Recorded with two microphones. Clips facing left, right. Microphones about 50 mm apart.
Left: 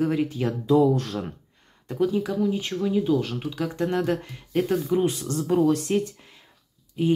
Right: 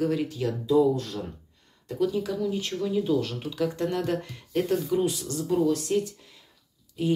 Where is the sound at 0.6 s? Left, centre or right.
Left.